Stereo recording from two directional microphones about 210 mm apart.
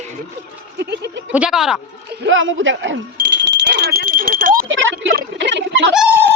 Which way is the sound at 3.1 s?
50° right (ahead or behind).